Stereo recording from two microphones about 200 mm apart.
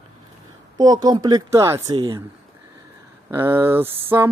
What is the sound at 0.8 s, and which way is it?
A woman's voice, 20° right (ahead or behind).